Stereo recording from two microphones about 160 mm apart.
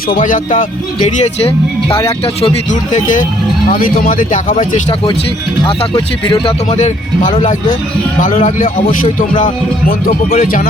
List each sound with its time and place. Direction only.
0.1 s speech: 55° left (ahead or behind)
1.0 s speech: 40° left (ahead or behind)
2.9 s speech: 55° left (ahead or behind)
5.6 s speech: 30° left (ahead or behind)
6.7 s speech: 45° left (ahead or behind); by 10.7 s 60° left (ahead or behind)